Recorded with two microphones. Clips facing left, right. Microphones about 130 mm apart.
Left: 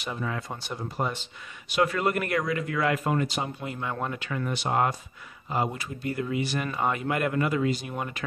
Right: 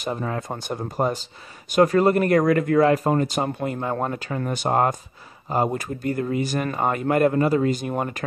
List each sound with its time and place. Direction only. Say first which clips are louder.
0.0 s speech: right 5 dB; 40° right (ahead or behind)